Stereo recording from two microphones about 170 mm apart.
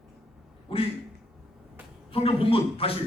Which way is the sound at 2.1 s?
35° left (ahead or behind).